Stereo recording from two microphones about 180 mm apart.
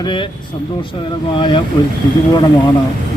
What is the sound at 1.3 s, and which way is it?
Speech, 25° left (ahead or behind).